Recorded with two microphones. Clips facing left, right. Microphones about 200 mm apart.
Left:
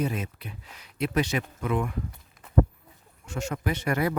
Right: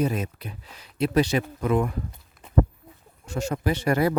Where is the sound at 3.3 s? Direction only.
35° right (ahead or behind).